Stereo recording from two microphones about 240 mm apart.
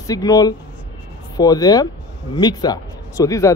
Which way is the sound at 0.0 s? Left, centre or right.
Centre.